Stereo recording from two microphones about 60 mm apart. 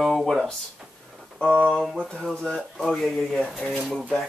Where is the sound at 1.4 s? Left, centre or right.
Centre.